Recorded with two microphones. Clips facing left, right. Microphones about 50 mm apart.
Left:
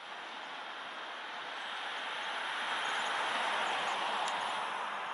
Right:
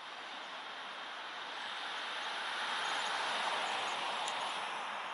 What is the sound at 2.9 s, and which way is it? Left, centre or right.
Vehicle, left.